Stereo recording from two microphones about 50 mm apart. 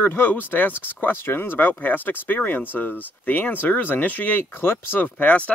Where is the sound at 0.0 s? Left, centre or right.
Left.